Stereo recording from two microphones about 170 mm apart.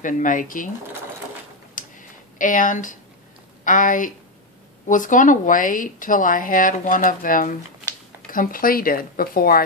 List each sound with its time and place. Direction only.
0.0 s speech: 50° left (ahead or behind)
1.8 s a sound: 50° left (ahead or behind)
3.6 s speech: 50° left (ahead or behind)